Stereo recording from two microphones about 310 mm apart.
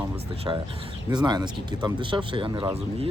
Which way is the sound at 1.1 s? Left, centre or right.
Centre.